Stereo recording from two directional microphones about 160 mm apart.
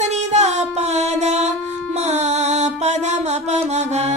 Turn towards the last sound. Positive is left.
turn(degrees=-45)  # may be behind; listen again after turning